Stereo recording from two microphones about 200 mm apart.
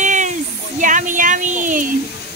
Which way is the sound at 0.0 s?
40° right (ahead or behind).